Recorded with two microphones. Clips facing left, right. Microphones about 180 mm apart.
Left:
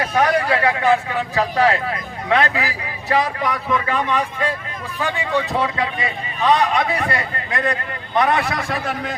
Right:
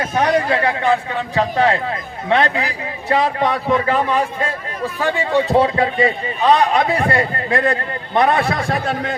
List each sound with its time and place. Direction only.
0.0 s a man's voice: 20° right (ahead or behind)